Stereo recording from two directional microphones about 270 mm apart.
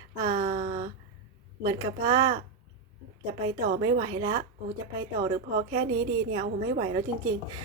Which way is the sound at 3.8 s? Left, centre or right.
Centre.